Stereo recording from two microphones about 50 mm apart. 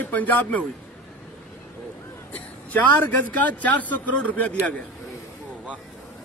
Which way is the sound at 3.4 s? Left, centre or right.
Left.